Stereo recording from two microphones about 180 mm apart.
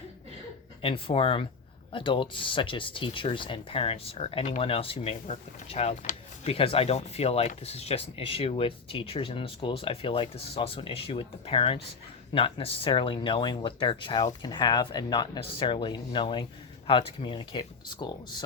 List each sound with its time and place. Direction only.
0.8 s speech: 30° left (ahead or behind)